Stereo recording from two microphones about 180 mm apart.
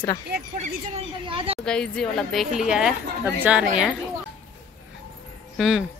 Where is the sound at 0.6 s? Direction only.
40° right (ahead or behind).